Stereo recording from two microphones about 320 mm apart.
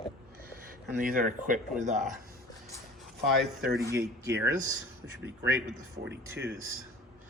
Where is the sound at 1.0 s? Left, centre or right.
Right.